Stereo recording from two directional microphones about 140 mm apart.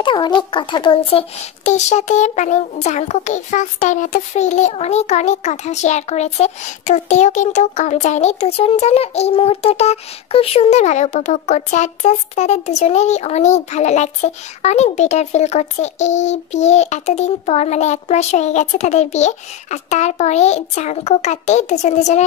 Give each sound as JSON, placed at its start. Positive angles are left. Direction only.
{"t": 0.0, "sound": "a child's voice", "side_deg": 35}